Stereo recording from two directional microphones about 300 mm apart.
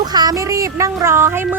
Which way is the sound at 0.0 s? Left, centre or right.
Centre.